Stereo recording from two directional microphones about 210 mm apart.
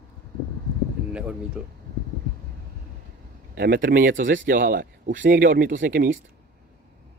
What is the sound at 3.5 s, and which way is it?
Speech, 50° right (ahead or behind).